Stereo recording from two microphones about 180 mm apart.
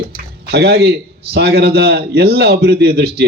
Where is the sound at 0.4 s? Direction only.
65° right (ahead or behind).